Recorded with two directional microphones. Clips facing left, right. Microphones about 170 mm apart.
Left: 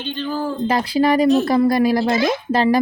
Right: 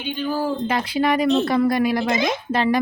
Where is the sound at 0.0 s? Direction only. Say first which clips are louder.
Even; 10° right (ahead or behind).